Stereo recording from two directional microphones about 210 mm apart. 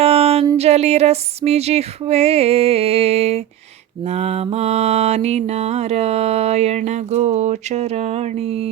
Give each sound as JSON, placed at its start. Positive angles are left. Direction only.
{"t": 0.0, "sound": "a sound", "side_deg": -30}
{"t": 0.5, "sound": "female singing", "side_deg": -30}
{"t": 4.1, "sound": "mantra", "side_deg": -30}